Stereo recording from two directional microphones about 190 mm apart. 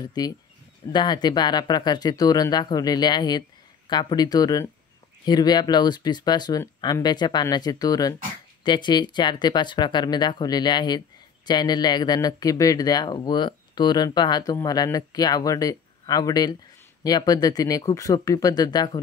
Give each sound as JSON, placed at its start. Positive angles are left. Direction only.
{"t": 0.9, "sound": "speech", "side_deg": 20}